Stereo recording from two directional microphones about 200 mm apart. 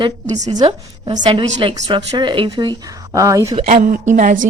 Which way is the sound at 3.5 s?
35° right (ahead or behind).